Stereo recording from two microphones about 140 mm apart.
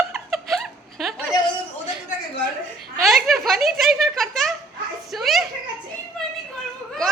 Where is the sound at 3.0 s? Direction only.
Centre (ahead or behind).